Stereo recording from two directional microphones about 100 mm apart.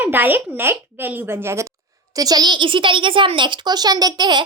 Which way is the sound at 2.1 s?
40° right (ahead or behind).